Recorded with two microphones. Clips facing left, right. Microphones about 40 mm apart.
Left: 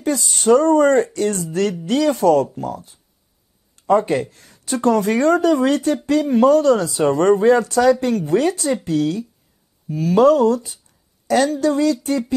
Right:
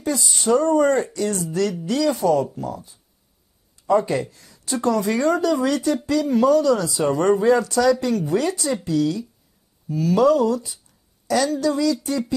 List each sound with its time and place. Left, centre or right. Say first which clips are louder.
0.0 s speech: left 4 dB; left